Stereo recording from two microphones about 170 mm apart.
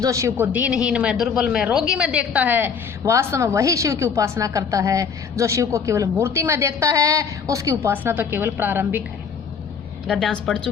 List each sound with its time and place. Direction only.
0.0 s speech: 20° right (ahead or behind)
10.1 s a woman's voice: centre (ahead or behind)